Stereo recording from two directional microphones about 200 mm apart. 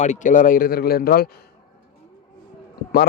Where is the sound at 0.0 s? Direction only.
40° left (ahead or behind).